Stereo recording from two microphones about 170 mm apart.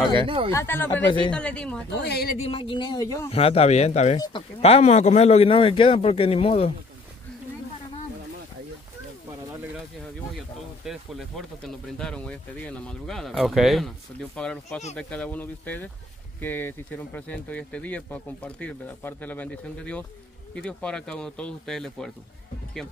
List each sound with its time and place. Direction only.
0.2 s speech: 30° right (ahead or behind)
0.5 s speech: 15° left (ahead or behind)
2.0 s speech: 70° left (ahead or behind)
2.3 s speech: 35° left (ahead or behind)
3.3 s a man's voice: 35° left (ahead or behind)
10.9 s speech: centre (ahead or behind)